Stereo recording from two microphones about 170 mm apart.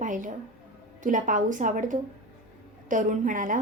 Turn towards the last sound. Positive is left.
turn(degrees=-50)  # may be behind; listen again after turning